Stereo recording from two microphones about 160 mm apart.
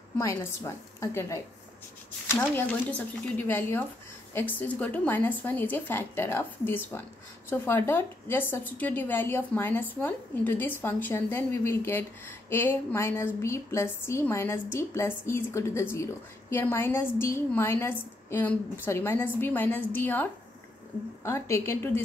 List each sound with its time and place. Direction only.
0.2 s a woman's voice: 15° left (ahead or behind)